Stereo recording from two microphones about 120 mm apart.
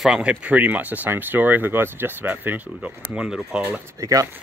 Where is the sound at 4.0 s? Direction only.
30° right (ahead or behind).